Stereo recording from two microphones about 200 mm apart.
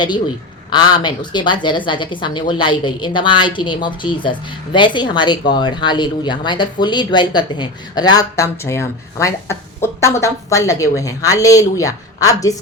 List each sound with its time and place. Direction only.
0.7 s a woman's voice: 20° left (ahead or behind)